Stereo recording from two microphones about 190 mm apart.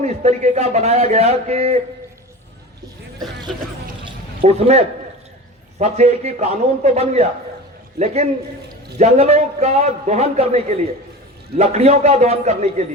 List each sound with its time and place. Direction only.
0.0 s a man's voice: 35° right (ahead or behind)
4.4 s a man's voice: 35° right (ahead or behind)
5.8 s a man's voice: 35° right (ahead or behind)